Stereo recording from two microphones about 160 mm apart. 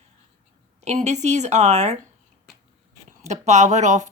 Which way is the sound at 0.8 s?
45° right (ahead or behind).